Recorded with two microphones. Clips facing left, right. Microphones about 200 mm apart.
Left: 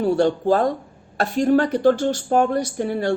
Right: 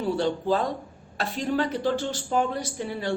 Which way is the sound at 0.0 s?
50° left (ahead or behind).